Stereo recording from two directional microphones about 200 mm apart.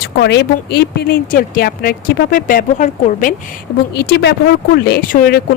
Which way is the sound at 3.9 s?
55° left (ahead or behind).